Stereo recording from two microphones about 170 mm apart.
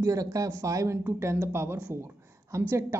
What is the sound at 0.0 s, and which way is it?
Speech, 20° right (ahead or behind).